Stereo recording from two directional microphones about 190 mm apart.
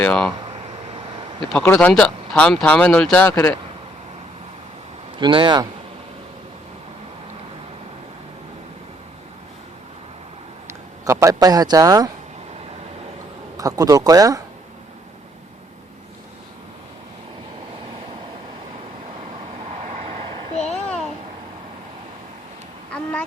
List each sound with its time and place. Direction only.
0.0 s speech: 5° left (ahead or behind)
0.4 s a sound: 35° right (ahead or behind)
1.5 s speech: 10° left (ahead or behind)
5.1 s speech: 25° right (ahead or behind)
10.7 s a man's voice: 15° right (ahead or behind)
13.6 s speech: 20° right (ahead or behind)
19.8 s vehicle: 35° right (ahead or behind)
20.6 s a sound: 35° left (ahead or behind)